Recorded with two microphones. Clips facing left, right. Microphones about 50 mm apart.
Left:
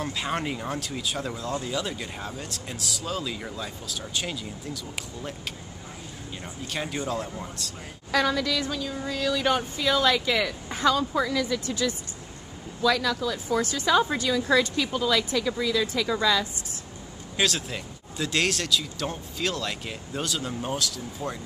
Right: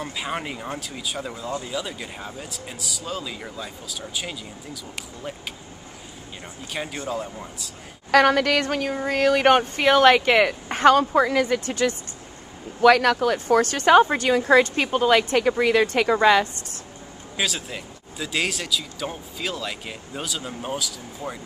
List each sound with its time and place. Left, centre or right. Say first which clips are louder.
0.0 s speech: even; centre
6.7 s speech: right 1 dB; centre
8.1 s a woman's voice: right 7 dB; right
17.4 s speech: left 1 dB; centre